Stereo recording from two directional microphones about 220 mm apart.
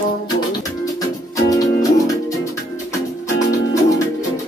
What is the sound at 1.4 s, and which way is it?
Music, 15° left (ahead or behind).